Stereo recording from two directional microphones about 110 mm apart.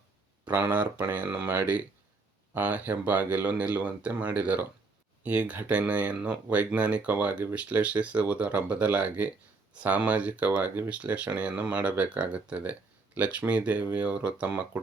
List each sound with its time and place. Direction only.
0.4 s speech: 15° right (ahead or behind)